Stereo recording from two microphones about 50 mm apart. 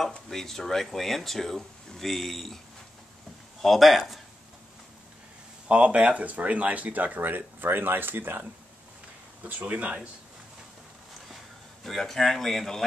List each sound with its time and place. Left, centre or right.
0.3 s speech: centre
3.6 s speech: centre
5.7 s speech: right
7.2 s speech: right
9.4 s speech: right
11.8 s speech: centre